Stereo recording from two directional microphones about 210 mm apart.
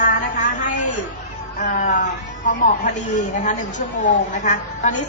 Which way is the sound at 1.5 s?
35° left (ahead or behind).